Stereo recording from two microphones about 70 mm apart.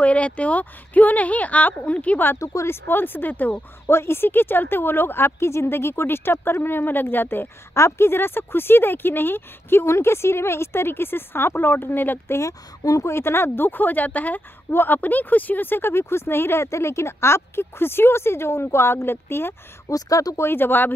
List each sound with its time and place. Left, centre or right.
0.0 s speech: centre
2.3 s speech: left
3.8 s speech: left
12.4 s speech: left
19.9 s speech: left
20.3 s speech: left